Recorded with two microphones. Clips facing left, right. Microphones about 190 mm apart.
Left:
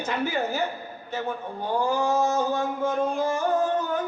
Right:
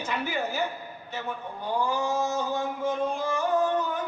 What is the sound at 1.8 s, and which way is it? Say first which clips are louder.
Speech: left 3 dB; 45° left (ahead or behind).